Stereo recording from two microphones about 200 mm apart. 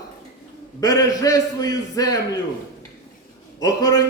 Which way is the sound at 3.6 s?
20° left (ahead or behind).